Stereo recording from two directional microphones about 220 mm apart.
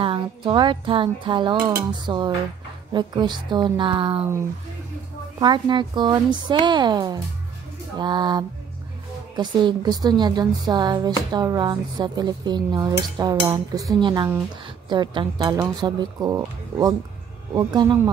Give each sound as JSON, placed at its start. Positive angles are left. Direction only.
{"t": 0.0, "sound": "speech", "side_deg": -25}
{"t": 5.4, "sound": "speech", "side_deg": -20}